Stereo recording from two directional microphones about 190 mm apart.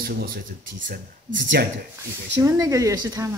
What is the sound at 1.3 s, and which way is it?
Speech, 70° right (ahead or behind).